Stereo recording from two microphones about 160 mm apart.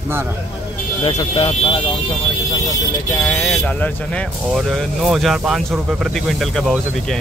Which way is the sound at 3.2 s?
10° left (ahead or behind).